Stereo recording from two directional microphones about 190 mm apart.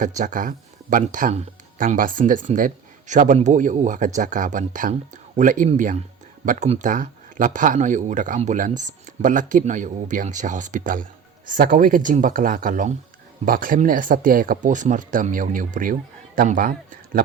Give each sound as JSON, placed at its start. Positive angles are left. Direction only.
{"t": 0.0, "sound": "speech", "side_deg": -45}